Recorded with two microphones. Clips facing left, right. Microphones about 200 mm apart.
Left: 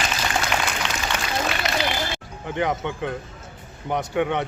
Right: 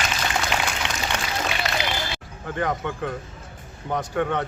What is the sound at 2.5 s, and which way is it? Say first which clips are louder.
Speech: left 1 dB; 20° left (ahead or behind).